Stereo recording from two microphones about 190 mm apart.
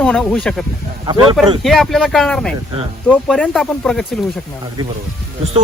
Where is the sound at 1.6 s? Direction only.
Centre (ahead or behind).